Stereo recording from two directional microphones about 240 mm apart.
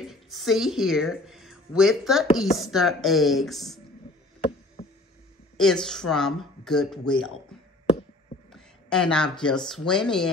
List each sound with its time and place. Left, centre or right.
0.0 s a woman's voice: centre
4.8 s a sound: left
5.6 s speech: centre
8.5 s speech: centre